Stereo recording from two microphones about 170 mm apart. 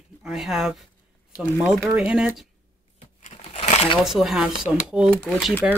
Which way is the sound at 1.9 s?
5° right (ahead or behind).